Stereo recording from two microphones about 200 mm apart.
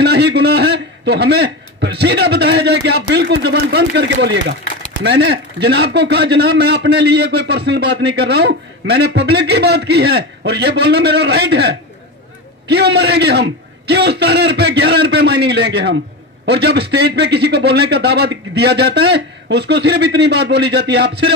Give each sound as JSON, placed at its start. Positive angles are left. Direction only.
{"t": 0.0, "sound": "a man's voice", "side_deg": -55}